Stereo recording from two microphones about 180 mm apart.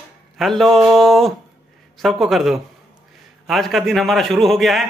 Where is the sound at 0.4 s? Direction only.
Centre (ahead or behind).